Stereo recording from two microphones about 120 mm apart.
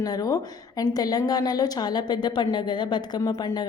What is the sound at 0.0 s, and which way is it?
A woman's voice, 30° left (ahead or behind).